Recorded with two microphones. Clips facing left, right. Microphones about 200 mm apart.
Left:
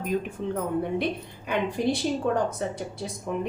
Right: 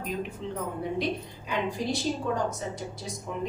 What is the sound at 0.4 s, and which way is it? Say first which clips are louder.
A woman's voice: left 5 dB; 55° left (ahead or behind).